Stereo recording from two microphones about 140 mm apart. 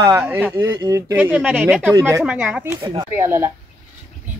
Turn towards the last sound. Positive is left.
turn(degrees=-15)  # may be behind; listen again after turning